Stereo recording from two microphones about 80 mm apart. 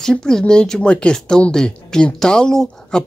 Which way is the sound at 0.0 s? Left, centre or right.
Centre.